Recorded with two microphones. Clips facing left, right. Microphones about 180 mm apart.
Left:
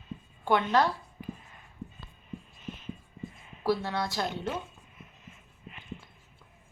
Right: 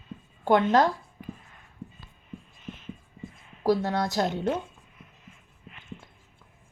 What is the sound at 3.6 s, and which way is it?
Speech, 45° right (ahead or behind).